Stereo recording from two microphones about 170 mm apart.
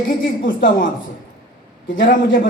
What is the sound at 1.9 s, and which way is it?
Speech, 55° left (ahead or behind).